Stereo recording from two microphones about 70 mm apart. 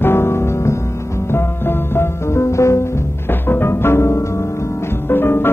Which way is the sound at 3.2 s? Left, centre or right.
Left.